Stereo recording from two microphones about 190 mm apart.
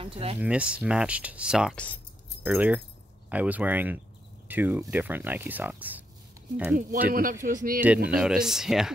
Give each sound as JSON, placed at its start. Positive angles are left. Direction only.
{"t": 0.0, "sound": "speech", "side_deg": -30}
{"t": 0.4, "sound": "speech", "side_deg": -5}
{"t": 7.4, "sound": "speech", "side_deg": -45}
{"t": 7.8, "sound": "speech", "side_deg": -5}